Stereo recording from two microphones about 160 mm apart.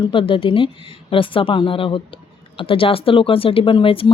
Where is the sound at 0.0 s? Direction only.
30° left (ahead or behind).